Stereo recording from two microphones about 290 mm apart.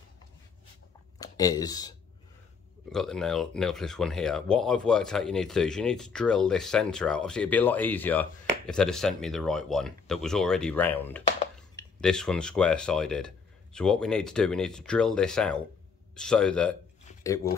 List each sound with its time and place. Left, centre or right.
1.1 s speech: centre
2.9 s speech: centre